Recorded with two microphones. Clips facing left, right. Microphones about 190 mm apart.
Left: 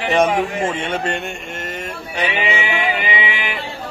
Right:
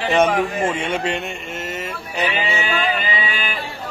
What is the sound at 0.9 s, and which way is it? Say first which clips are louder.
Mantra: even; 5° right (ahead or behind).